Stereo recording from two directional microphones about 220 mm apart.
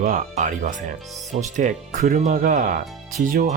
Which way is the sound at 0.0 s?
35° right (ahead or behind).